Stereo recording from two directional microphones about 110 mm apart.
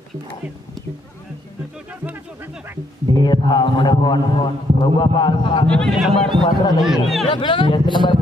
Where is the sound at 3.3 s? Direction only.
40° left (ahead or behind).